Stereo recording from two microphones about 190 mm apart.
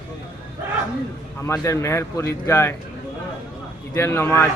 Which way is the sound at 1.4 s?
15° left (ahead or behind).